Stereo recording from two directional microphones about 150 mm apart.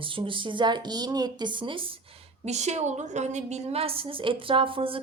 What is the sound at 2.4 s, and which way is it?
Speech, 50° right (ahead or behind).